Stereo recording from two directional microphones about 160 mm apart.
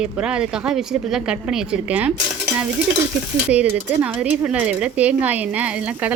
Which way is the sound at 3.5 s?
10° right (ahead or behind).